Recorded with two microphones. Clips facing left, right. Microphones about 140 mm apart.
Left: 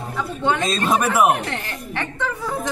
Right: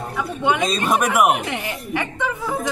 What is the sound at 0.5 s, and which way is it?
Speech, 15° right (ahead or behind).